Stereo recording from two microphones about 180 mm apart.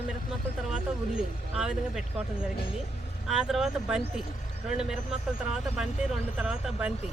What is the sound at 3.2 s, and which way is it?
Speech, centre (ahead or behind).